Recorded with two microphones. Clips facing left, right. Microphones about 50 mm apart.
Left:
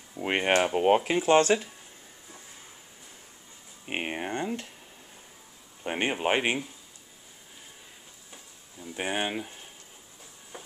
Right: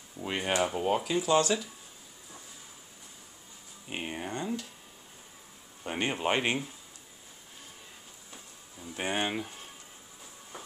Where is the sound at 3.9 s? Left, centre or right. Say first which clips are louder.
Left 4 dB; left.